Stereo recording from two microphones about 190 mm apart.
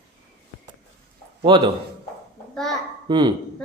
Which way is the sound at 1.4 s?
25° right (ahead or behind).